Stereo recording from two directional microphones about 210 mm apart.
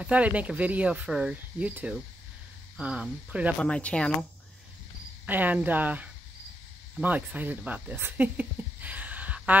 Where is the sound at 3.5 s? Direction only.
5° left (ahead or behind).